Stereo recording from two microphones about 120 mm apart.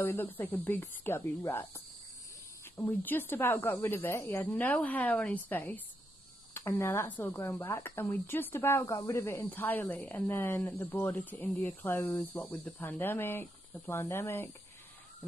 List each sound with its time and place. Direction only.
0.0 s speech: 20° left (ahead or behind)
2.8 s speech: 15° left (ahead or behind)